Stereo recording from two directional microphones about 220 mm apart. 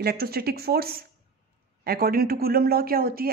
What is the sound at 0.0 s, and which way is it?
Speech, 45° right (ahead or behind).